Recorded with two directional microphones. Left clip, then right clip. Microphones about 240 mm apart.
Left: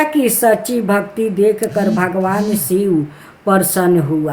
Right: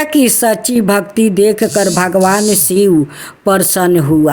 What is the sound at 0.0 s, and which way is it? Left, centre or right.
A woman's voice, right.